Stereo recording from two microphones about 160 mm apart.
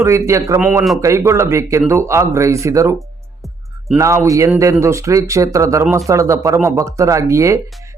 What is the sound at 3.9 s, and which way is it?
Speech, 20° right (ahead or behind).